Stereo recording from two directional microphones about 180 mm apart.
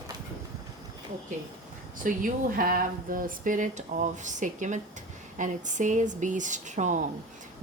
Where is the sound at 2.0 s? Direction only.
50° right (ahead or behind).